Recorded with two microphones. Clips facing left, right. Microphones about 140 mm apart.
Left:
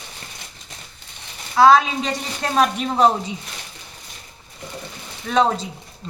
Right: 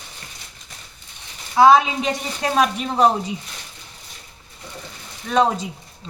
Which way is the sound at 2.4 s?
5° right (ahead or behind).